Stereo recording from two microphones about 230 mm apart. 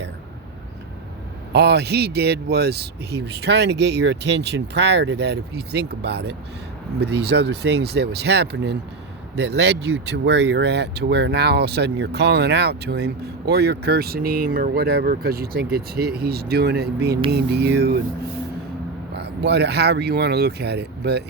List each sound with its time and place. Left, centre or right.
1.5 s speech: right
19.1 s speech: right